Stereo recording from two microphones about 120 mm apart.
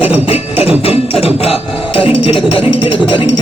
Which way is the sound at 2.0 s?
50° left (ahead or behind).